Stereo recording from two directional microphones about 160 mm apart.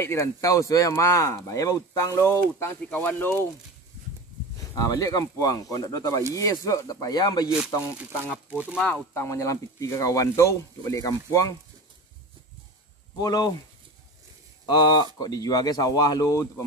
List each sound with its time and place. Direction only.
0.0 s speech: 15° left (ahead or behind)
4.6 s speech: 20° left (ahead or behind)
8.5 s speech: 10° right (ahead or behind)
8.8 s speech: 10° left (ahead or behind)
13.2 s speech: 25° left (ahead or behind)
14.7 s speech: 25° left (ahead or behind)